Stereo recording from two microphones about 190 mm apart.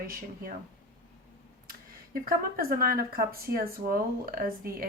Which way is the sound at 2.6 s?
50° right (ahead or behind).